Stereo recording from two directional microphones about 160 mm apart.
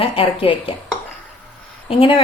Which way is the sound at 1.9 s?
35° left (ahead or behind).